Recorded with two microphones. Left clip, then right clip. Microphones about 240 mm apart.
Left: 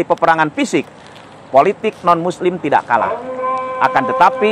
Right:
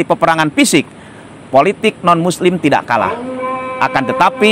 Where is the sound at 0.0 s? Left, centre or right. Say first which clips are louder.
Right 1 dB; right.